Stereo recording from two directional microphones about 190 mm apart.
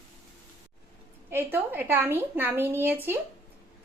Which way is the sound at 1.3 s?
10° right (ahead or behind).